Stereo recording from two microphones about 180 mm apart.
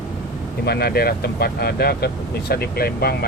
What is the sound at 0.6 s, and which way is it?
Speech, 60° left (ahead or behind).